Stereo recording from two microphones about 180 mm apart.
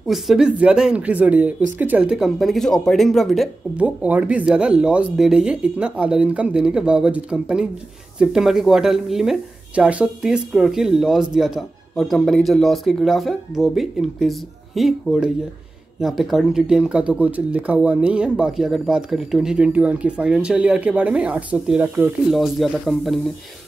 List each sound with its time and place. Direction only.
0.0 s speech: centre (ahead or behind)